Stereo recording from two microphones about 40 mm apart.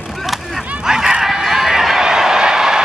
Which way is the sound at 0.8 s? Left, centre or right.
Centre.